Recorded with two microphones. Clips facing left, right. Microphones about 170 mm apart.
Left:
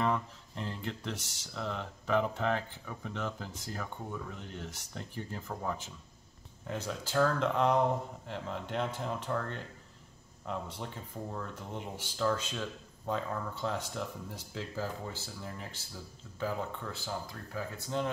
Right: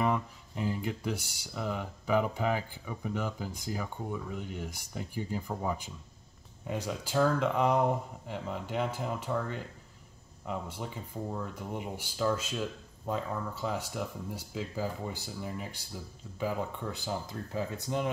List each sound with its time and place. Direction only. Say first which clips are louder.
0.0 s speech: right 2 dB; 10° right (ahead or behind)